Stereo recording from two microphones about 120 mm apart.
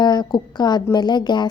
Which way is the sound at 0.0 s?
35° left (ahead or behind).